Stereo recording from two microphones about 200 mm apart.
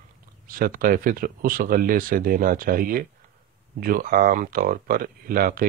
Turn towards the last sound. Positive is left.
turn(degrees=-45)  # may be behind; listen again after turning